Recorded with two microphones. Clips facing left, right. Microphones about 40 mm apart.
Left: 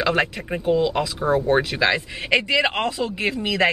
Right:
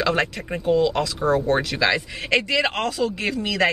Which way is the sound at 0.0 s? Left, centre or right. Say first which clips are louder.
Left 1 dB; centre.